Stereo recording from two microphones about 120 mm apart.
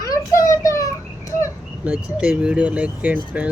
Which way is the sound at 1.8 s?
10° right (ahead or behind).